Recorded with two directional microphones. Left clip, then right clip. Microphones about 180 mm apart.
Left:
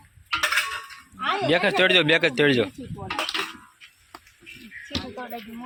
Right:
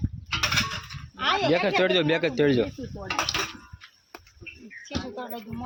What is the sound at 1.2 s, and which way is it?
Speech, 20° left (ahead or behind).